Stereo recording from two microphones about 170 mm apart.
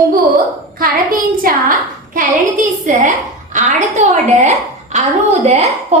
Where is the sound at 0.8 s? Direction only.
55° right (ahead or behind).